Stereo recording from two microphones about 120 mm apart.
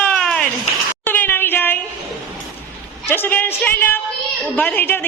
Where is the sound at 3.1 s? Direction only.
15° left (ahead or behind).